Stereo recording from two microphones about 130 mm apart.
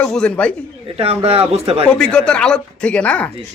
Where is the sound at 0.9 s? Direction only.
50° right (ahead or behind).